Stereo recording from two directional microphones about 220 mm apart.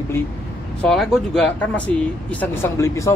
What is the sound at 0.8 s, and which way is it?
Speech, 5° left (ahead or behind).